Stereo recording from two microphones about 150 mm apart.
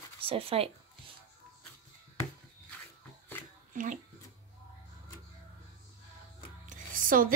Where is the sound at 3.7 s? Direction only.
65° right (ahead or behind).